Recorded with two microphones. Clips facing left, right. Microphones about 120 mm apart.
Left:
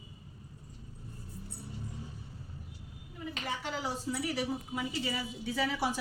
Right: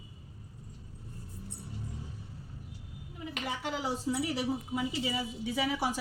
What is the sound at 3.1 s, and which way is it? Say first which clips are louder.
A woman's voice: right 1 dB; 15° right (ahead or behind).